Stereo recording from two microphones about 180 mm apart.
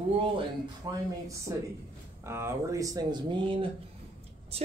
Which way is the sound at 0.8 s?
20° right (ahead or behind).